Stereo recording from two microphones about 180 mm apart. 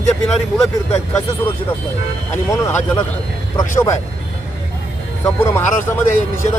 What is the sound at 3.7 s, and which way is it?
Speech, 15° left (ahead or behind).